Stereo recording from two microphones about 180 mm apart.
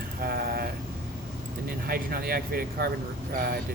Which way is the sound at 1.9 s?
55° right (ahead or behind).